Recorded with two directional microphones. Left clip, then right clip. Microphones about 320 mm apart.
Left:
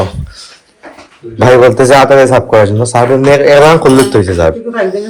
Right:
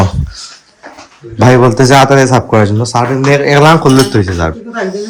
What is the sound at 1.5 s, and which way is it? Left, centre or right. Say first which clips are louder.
A man's voice: left 3 dB; centre.